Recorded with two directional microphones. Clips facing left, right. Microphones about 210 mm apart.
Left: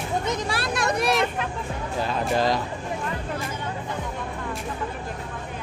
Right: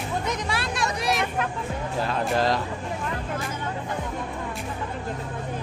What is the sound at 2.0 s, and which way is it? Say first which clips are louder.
Music: left 1 dB; centre (ahead or behind).